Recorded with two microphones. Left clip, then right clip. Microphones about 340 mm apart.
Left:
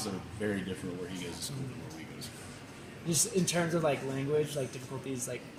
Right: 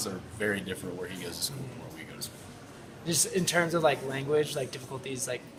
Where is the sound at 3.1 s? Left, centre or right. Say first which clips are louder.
Right 3 dB; right.